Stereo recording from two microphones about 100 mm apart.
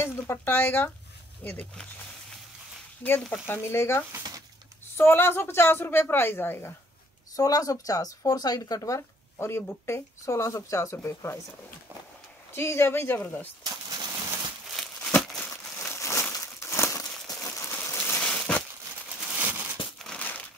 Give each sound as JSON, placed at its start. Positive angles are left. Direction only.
{"t": 0.0, "sound": "speech", "side_deg": 25}
{"t": 3.0, "sound": "speech", "side_deg": 15}
{"t": 7.3, "sound": "speech", "side_deg": 35}
{"t": 12.5, "sound": "speech", "side_deg": 25}
{"t": 13.7, "sound": "a sound", "side_deg": -40}
{"t": 15.0, "sound": "crumpling", "side_deg": 15}
{"t": 15.8, "sound": "crumpling", "side_deg": 25}
{"t": 17.3, "sound": "a sound", "side_deg": 35}
{"t": 18.2, "sound": "a sound", "side_deg": 10}
{"t": 19.3, "sound": "crumpling", "side_deg": -15}
{"t": 20.0, "sound": "crumpling", "side_deg": 10}